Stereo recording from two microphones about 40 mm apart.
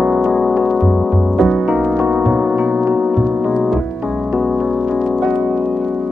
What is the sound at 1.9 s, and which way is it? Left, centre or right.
Music, right.